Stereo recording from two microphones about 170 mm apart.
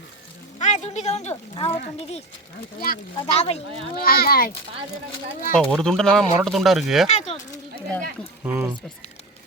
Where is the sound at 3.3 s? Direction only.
40° left (ahead or behind).